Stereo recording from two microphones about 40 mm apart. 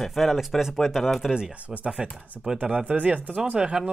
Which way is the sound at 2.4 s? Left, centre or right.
Centre.